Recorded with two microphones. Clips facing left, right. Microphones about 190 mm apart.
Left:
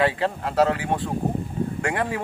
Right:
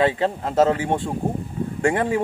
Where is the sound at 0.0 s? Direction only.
25° right (ahead or behind).